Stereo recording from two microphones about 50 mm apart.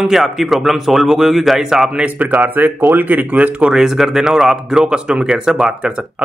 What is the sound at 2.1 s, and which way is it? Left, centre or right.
Speech, right.